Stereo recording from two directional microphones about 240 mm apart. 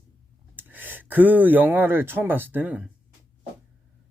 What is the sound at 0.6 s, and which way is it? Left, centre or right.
Speech, centre.